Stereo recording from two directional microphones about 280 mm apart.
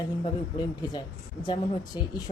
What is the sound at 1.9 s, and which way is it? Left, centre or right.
Speech, centre.